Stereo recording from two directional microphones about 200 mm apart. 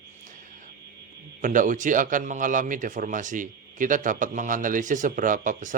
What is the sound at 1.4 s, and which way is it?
Speech, 40° right (ahead or behind).